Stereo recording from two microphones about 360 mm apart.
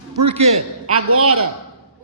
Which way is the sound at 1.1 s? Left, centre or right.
Right.